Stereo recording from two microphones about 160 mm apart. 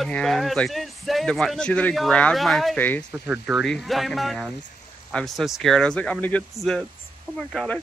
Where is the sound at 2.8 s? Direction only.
10° left (ahead or behind).